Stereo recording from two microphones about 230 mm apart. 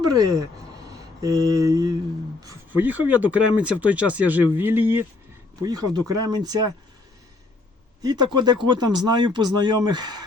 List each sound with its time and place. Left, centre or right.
0.1 s speech: centre
0.9 s a sound: centre
2.4 s speech: centre
8.0 s speech: centre